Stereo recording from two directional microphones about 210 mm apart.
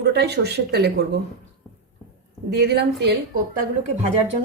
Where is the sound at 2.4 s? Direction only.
50° right (ahead or behind).